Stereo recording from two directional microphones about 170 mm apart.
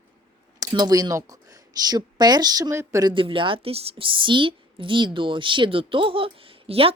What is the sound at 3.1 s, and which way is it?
A woman's voice, 30° right (ahead or behind).